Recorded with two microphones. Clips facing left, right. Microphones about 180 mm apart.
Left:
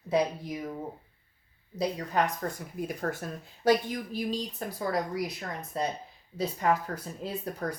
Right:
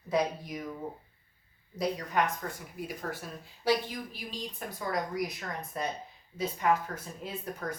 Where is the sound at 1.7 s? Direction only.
30° left (ahead or behind).